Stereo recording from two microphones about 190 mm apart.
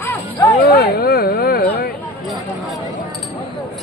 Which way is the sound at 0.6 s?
55° left (ahead or behind).